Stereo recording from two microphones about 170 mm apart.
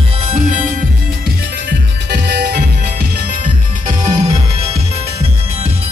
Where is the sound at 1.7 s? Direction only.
80° right.